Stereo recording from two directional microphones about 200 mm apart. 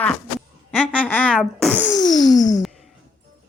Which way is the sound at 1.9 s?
20° left (ahead or behind).